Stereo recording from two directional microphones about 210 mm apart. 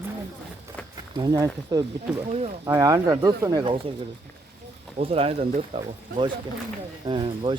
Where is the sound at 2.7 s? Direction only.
15° right (ahead or behind).